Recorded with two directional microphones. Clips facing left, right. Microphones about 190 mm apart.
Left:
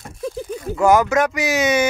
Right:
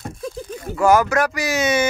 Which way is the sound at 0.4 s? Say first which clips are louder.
Left 1 dB; 15° left (ahead or behind).